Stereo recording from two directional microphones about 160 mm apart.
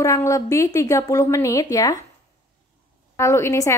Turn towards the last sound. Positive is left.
turn(degrees=20)  # may be behind; listen again after turning